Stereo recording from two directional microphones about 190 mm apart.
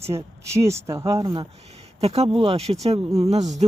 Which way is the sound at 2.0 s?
30° right (ahead or behind).